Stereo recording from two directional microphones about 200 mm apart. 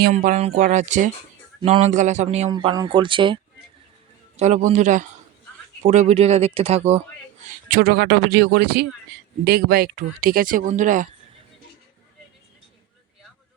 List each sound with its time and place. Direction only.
0.1 s speech: 40° right (ahead or behind)
2.5 s speech: 25° right (ahead or behind)
4.4 s speech: 35° right (ahead or behind)
7.7 s speech: 50° right (ahead or behind)